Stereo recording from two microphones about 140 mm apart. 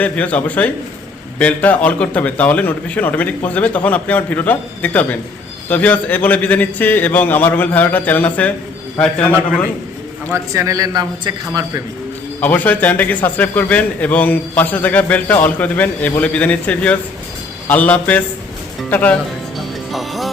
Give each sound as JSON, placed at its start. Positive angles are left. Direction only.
{"t": 0.0, "sound": "a man's voice", "side_deg": 10}
{"t": 10.3, "sound": "a man's voice", "side_deg": -20}
{"t": 12.4, "sound": "a man's voice", "side_deg": 10}
{"t": 19.5, "sound": "music", "side_deg": 0}